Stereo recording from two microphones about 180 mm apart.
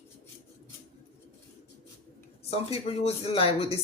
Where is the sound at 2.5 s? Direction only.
35° left (ahead or behind).